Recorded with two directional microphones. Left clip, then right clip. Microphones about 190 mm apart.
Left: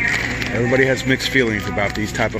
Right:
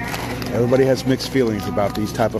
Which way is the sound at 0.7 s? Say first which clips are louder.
Left 1 dB; 15° right (ahead or behind).